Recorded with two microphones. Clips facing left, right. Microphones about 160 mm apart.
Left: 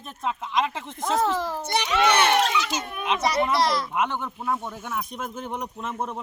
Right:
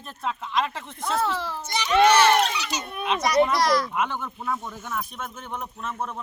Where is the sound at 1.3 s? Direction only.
45° left (ahead or behind); by 2.8 s 90° left.